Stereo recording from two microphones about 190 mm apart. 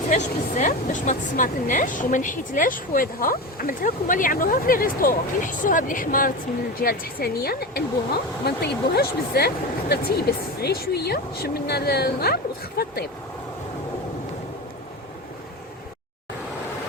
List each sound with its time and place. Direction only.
0.1 s speech: 40° left (ahead or behind)